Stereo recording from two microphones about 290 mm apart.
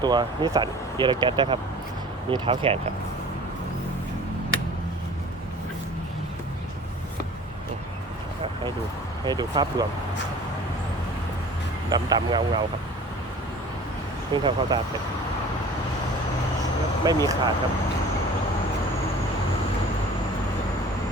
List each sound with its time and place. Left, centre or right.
0.0 s speech: centre
9.2 s speech: centre
11.9 s speech: centre
14.3 s speech: centre
17.0 s speech: centre